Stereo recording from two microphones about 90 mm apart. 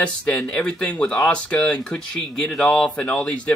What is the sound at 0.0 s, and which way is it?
Speech, 10° left (ahead or behind).